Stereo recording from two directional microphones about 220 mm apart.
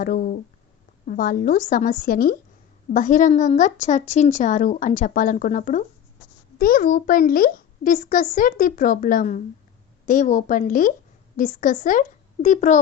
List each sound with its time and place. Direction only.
0.0 s a woman's voice: 40° left (ahead or behind)